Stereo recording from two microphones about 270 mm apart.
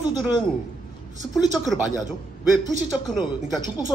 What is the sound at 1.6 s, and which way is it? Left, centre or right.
Speech, centre.